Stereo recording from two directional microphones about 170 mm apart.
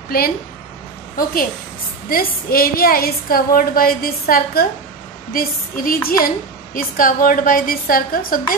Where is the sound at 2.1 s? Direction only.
60° left (ahead or behind).